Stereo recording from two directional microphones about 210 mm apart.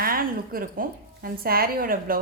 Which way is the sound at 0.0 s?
45° right (ahead or behind).